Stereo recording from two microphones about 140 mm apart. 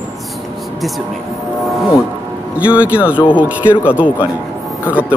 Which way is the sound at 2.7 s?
10° right (ahead or behind).